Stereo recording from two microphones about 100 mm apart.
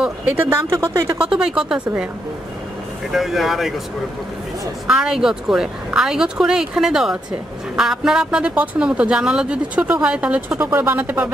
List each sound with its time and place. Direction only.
0.5 s speech: 30° right (ahead or behind)
1.3 s a woman's voice: 5° right (ahead or behind)
3.1 s speech: 5° right (ahead or behind)
4.8 s a woman's voice: 5° right (ahead or behind)